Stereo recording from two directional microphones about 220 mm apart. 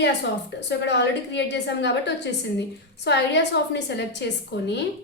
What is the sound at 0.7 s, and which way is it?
A woman's voice, 50° left (ahead or behind).